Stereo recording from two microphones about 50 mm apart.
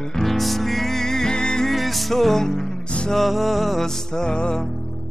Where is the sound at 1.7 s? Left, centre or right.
Centre.